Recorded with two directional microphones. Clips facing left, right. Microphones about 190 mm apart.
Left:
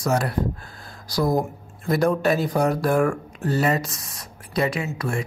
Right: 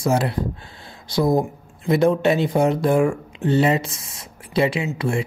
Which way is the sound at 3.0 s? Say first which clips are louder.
Right 2 dB; 10° right (ahead or behind).